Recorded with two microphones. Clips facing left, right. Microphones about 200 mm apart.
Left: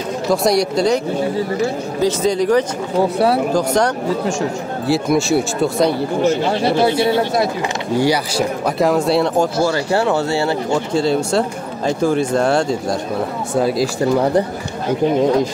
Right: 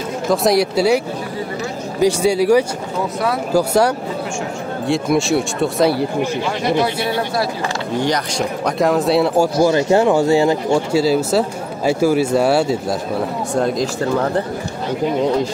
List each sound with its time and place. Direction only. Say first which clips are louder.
0.3 s speech: even; centre (ahead or behind)
3.0 s speech: left 6 dB; 30° left (ahead or behind)
3.5 s speech: right 1 dB; 5° right (ahead or behind)
6.6 s speech: left 2 dB; 25° left (ahead or behind)
7.9 s speech: left 4 dB; 10° left (ahead or behind)
9.6 s speech: right 3 dB; 20° right (ahead or behind)
13.6 s speech: left 2 dB; 5° left (ahead or behind)